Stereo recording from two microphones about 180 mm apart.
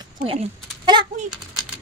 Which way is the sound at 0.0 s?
30° right (ahead or behind).